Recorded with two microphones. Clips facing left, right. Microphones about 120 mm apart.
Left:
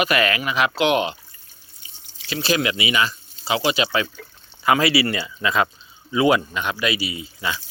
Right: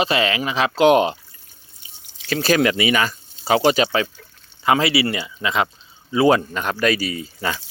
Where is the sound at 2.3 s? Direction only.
50° right (ahead or behind).